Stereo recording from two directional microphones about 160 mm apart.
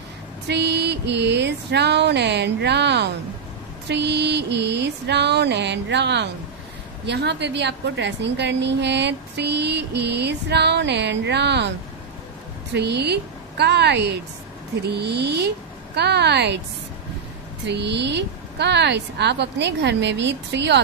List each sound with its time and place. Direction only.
0.5 s a woman's voice: 90° right
12.7 s a woman's voice: 90° right
17.6 s a woman's voice: 90° right